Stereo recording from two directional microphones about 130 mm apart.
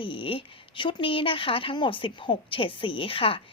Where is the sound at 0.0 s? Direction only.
40° left (ahead or behind).